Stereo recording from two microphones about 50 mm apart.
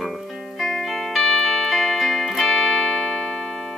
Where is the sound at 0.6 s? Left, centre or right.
Centre.